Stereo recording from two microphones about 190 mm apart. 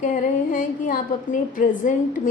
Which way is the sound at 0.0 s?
45° left (ahead or behind).